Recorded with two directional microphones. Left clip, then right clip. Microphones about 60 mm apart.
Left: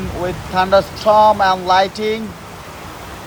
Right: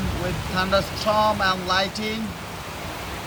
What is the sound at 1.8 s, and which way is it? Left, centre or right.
Speech, left.